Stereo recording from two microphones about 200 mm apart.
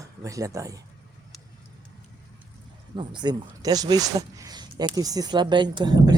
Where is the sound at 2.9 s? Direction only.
20° right (ahead or behind).